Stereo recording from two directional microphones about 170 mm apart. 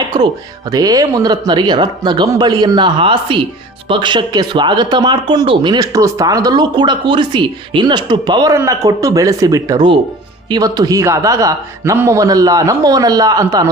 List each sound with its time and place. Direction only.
0.7 s speech: 20° right (ahead or behind)